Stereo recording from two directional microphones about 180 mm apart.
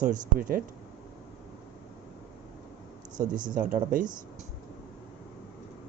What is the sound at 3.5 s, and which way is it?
Speech, 45° right (ahead or behind).